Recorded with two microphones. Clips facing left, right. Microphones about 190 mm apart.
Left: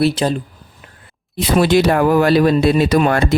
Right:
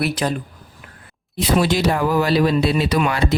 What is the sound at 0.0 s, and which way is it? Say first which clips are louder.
Speech: left 5 dB; 30° left (ahead or behind).